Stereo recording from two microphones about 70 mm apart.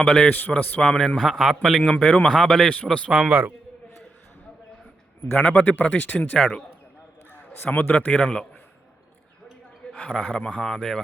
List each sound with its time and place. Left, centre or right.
0.0 s a man's voice: centre
0.3 s speech: left
0.8 s a man's voice: centre
3.1 s a man's voice: centre
5.3 s a man's voice: left
7.6 s a man's voice: left; by 8.4 s centre
10.2 s a man's voice: centre